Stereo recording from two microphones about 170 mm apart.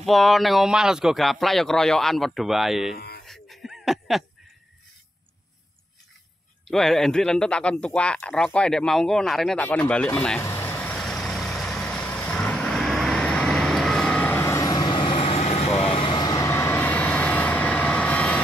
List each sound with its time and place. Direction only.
0.0 s a man's voice: centre (ahead or behind)
3.3 s a sound: centre (ahead or behind)
6.7 s a man's voice: centre (ahead or behind)
10.4 s vehicle: 15° left (ahead or behind)